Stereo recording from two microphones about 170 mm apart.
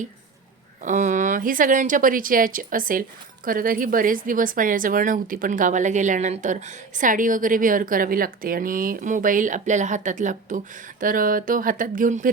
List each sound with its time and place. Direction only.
0.8 s speech: 45° right (ahead or behind)